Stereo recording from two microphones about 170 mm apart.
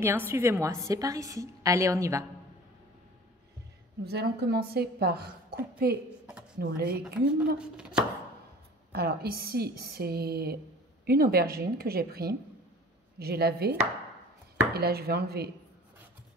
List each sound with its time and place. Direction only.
0.0 s a woman's voice: 15° right (ahead or behind)
4.0 s a woman's voice: 75° right (ahead or behind)
7.5 s chopping: 5° right (ahead or behind)
8.9 s a woman's voice: 65° right (ahead or behind)